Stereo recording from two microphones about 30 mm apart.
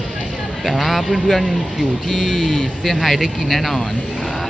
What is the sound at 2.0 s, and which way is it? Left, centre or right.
Speech, centre.